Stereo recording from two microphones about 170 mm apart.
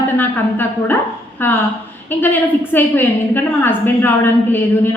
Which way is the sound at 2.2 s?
10° left (ahead or behind).